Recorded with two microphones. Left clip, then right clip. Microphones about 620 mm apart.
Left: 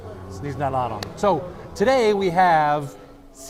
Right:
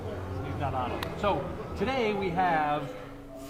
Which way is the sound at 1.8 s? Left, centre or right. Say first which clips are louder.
Left 11 dB; left.